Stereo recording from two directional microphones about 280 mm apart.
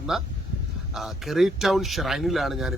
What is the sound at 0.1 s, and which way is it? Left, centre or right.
Speech, centre.